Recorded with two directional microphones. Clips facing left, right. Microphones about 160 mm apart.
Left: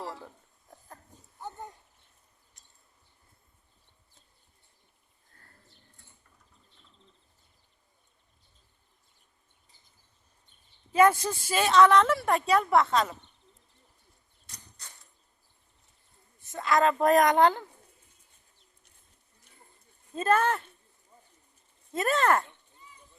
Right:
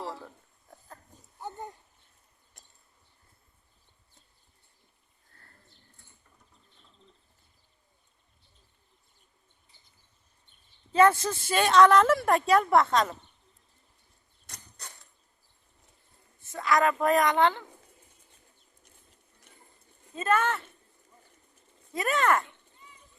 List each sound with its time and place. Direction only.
2.5 s a sound: 55° right (ahead or behind)
10.9 s a woman's voice: 15° left (ahead or behind)
16.4 s a sound: 20° left (ahead or behind)
17.0 s speech: 40° left (ahead or behind)
20.2 s speech: 35° left (ahead or behind)
21.9 s speech: 30° left (ahead or behind)